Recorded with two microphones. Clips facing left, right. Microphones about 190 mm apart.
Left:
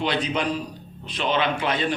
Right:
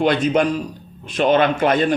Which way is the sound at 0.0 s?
50° right (ahead or behind).